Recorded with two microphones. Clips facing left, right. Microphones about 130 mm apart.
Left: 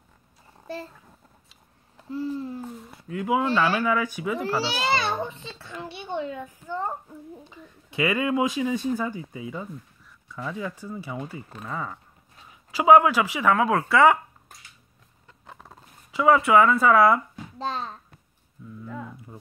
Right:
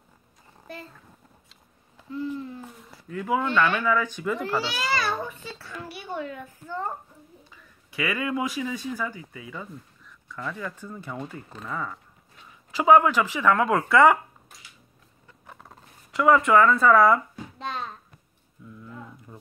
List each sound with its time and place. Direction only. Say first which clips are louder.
0.7 s a child's voice: left 6 dB; 30° left (ahead or behind)
2.0 s a sound: left 2 dB; 35° left (ahead or behind)
3.1 s speech: left 2 dB; 15° left (ahead or behind)
3.4 s a child's voice: left 1 dB; 35° left (ahead or behind)
3.8 s speech: even; 10° left (ahead or behind)
4.6 s a child's voice: left 2 dB; 30° left (ahead or behind)
10.3 s speech: left 2 dB; 10° left (ahead or behind)
16.2 s speech: even; 5° left (ahead or behind)
17.6 s a child's voice: left 3 dB; 30° left (ahead or behind)